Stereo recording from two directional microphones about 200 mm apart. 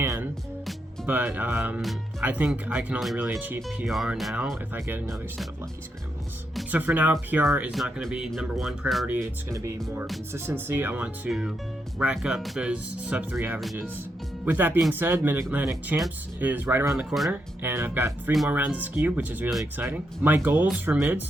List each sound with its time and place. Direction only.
0.0 s music: 15° right (ahead or behind)
1.0 s speech: 10° right (ahead or behind)
6.6 s speech: 10° right (ahead or behind)
9.5 s speech: 15° right (ahead or behind)